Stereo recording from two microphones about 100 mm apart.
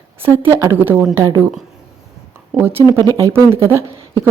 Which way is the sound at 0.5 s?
30° right (ahead or behind).